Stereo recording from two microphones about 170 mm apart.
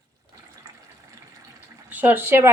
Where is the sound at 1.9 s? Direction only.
10° right (ahead or behind).